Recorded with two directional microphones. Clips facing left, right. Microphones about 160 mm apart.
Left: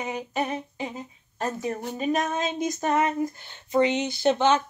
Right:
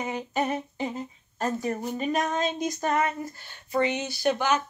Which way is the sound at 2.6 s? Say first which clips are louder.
Left 5 dB; 15° left (ahead or behind).